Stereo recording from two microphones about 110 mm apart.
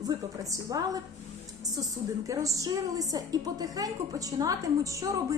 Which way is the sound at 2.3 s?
30° right (ahead or behind).